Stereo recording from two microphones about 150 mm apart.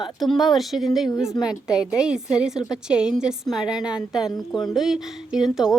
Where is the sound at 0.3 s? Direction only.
Centre (ahead or behind).